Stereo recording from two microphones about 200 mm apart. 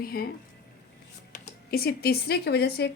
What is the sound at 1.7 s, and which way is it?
Speech, 50° left (ahead or behind).